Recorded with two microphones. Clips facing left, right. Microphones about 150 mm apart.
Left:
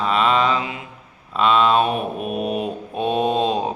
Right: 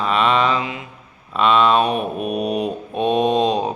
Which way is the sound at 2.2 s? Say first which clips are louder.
Right 2 dB; 15° right (ahead or behind).